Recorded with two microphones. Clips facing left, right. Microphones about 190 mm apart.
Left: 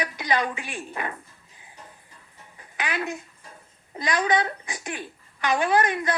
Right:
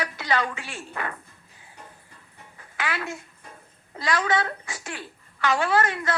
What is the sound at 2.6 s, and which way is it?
Babbling, 20° left (ahead or behind).